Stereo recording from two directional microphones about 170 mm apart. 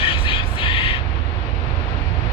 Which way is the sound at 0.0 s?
30° left (ahead or behind).